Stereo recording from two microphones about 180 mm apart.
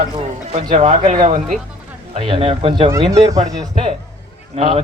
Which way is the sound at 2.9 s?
20° right (ahead or behind).